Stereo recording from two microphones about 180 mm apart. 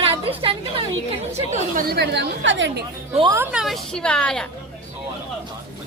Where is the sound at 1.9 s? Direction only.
65° right (ahead or behind); by 2.8 s 90° right.